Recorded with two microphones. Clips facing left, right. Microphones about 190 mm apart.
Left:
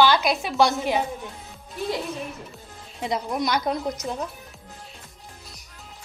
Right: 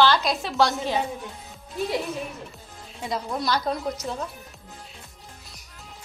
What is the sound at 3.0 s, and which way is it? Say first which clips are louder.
A woman's voice: left 2 dB; 20° left (ahead or behind).